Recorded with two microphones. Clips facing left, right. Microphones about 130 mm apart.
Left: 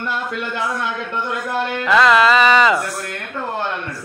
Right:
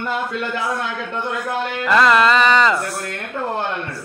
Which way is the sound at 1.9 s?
Centre (ahead or behind).